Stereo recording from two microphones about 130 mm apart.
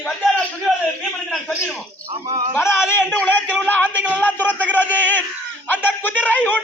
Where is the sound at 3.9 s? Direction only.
10° right (ahead or behind).